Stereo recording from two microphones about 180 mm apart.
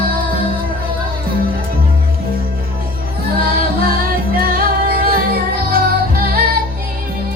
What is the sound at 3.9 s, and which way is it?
Music, 55° right (ahead or behind).